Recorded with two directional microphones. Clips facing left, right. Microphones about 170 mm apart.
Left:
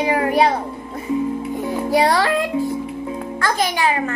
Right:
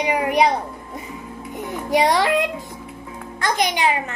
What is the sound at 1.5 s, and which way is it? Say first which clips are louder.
Music: even; 20° right (ahead or behind).